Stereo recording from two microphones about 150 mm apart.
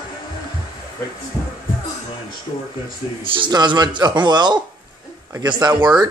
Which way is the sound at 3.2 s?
35° right (ahead or behind).